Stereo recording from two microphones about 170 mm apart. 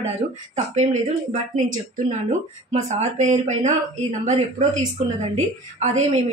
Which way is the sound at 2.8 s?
45° right (ahead or behind).